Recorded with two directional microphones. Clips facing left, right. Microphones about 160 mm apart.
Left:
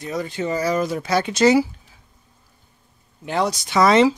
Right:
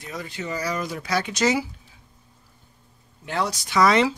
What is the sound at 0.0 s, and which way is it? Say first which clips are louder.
Speech: left 8 dB; 30° left (ahead or behind).